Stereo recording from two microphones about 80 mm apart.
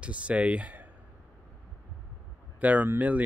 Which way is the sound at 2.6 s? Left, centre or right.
Right.